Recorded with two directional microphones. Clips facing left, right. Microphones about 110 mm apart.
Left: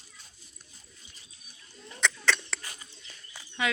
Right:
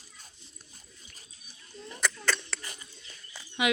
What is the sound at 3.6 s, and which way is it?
Speech, 15° right (ahead or behind).